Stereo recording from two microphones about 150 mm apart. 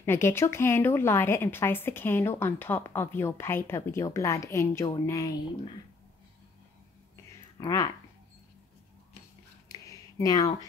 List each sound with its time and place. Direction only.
0.0 s a woman's voice: 15° left (ahead or behind)
7.5 s speech: 25° left (ahead or behind)
9.7 s a sound: 25° left (ahead or behind)